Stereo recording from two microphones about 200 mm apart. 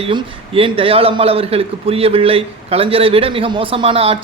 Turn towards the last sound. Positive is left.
turn(degrees=-25)  # may be behind; listen again after turning